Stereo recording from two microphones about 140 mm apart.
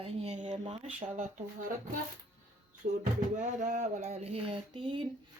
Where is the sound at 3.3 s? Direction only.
60° right (ahead or behind); by 5.1 s 35° right (ahead or behind).